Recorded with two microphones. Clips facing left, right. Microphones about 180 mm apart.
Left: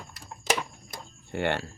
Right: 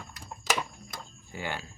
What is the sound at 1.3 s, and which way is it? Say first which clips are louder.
Speech: left 8 dB; 70° left (ahead or behind).